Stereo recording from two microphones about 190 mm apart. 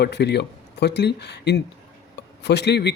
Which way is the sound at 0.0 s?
60° left (ahead or behind).